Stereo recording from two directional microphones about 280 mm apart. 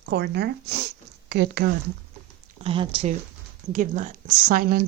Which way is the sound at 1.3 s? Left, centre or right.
Right.